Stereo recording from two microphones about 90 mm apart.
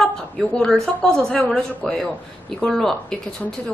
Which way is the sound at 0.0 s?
5° left (ahead or behind).